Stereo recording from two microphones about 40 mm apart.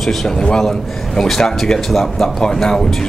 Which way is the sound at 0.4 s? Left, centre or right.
Centre.